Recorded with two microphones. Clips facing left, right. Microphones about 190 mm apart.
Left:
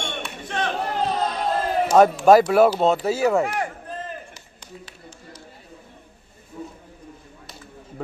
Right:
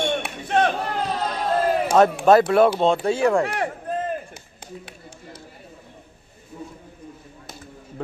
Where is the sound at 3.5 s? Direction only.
55° right (ahead or behind).